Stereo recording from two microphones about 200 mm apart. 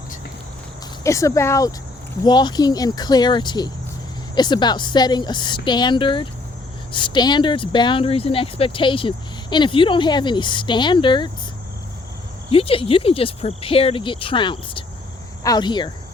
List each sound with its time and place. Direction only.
1.0 s speech: 15° left (ahead or behind)
12.5 s speech: 30° left (ahead or behind)